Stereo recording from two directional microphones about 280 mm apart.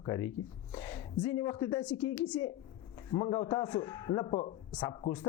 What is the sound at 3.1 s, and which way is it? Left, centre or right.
A man's voice, centre.